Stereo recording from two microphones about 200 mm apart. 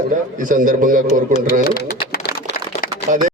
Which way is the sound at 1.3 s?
45° left (ahead or behind).